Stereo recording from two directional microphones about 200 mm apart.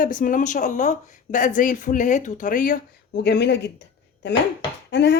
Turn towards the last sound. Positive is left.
turn(degrees=60)  # may be behind; listen again after turning